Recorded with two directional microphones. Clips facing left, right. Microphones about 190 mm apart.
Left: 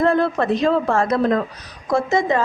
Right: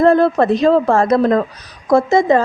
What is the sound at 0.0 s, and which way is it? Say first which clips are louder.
A woman's voice: right 6 dB; 35° right (ahead or behind).